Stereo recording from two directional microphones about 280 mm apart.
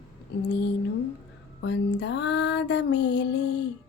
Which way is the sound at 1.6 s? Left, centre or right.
Left.